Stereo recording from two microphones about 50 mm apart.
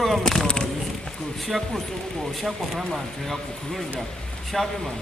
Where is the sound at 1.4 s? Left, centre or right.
Centre.